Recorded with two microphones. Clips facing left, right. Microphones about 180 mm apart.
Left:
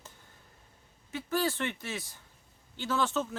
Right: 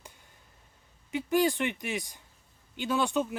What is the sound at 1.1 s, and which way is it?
Speech, 15° right (ahead or behind).